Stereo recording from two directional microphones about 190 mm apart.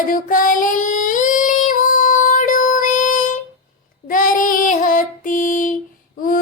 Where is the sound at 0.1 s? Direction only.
45° left (ahead or behind).